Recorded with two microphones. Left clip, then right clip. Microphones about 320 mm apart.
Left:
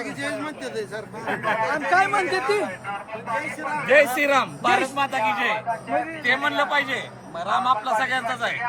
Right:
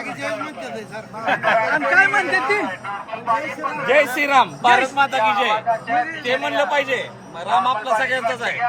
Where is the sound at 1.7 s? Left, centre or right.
Centre.